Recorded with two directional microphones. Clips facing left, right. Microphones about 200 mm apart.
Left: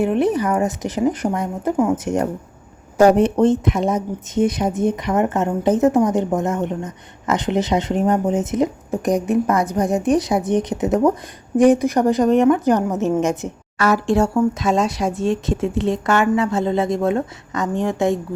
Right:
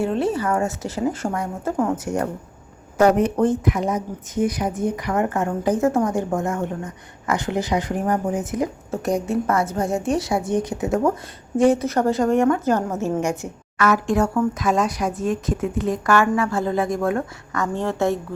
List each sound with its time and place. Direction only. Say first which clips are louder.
0.0 s a woman's voice: left 4 dB; 15° left (ahead or behind)
1.7 s a woman's voice: left 4 dB; 5° left (ahead or behind)
2.0 s a woman's voice: left 3 dB; 20° left (ahead or behind)
13.7 s speech: left 2 dB; 35° left (ahead or behind); by 18.2 s 15° left (ahead or behind)